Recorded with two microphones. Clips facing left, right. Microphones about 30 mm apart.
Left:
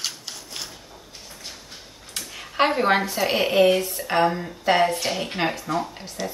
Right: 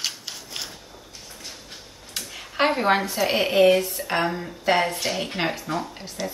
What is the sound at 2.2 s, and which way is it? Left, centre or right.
A woman's voice, centre.